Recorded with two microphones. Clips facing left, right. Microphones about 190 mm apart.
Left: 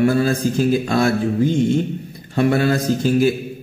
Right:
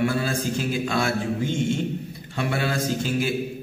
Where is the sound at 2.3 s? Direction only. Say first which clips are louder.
Left 10 dB; 45° left (ahead or behind).